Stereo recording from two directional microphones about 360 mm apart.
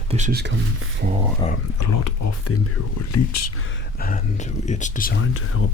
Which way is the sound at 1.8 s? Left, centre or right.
Left.